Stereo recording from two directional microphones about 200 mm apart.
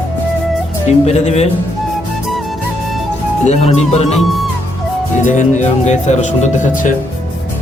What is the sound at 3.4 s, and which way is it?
Speech, 35° left (ahead or behind).